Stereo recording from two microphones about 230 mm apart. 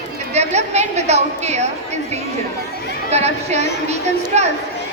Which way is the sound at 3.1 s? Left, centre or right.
Right.